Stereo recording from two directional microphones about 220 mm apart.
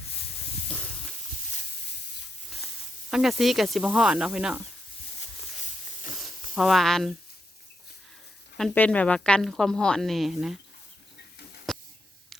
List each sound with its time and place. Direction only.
3.1 s a woman's voice: centre (ahead or behind)
6.5 s a woman's voice: centre (ahead or behind)
8.5 s a woman's voice: 5° left (ahead or behind)
11.7 s a sound: centre (ahead or behind)